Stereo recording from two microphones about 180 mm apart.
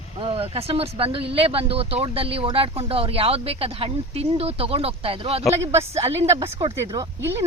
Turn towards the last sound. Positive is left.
turn(degrees=-15)  # may be behind; listen again after turning